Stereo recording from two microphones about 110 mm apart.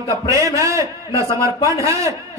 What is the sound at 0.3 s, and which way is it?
A man's voice, 30° right (ahead or behind).